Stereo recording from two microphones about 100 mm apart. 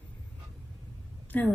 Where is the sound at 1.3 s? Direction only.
20° left (ahead or behind).